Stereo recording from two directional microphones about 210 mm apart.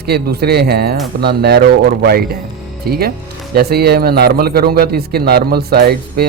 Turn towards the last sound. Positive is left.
turn(degrees=-50)  # may be behind; listen again after turning